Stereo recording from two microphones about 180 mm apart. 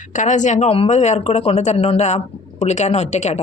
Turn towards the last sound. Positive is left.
turn(degrees=40)  # may be behind; listen again after turning